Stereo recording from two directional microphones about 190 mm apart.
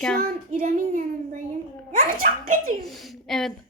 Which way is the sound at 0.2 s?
45° right (ahead or behind).